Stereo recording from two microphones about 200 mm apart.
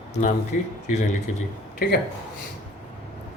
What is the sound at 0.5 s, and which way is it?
Speech, 40° left (ahead or behind).